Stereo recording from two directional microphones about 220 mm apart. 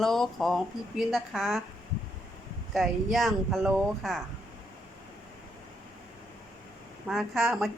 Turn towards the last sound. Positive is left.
turn(degrees=0)  # may be behind; listen again after turning